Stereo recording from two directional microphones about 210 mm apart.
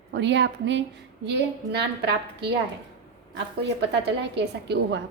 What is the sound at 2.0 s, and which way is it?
Speech, 50° right (ahead or behind).